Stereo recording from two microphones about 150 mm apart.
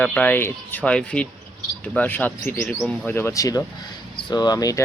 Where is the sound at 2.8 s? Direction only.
Centre (ahead or behind).